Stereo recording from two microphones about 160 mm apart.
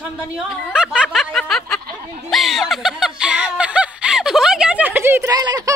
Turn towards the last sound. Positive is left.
turn(degrees=-25)  # may be behind; listen again after turning